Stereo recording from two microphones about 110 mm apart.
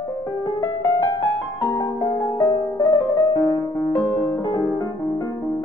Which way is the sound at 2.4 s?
40° left (ahead or behind).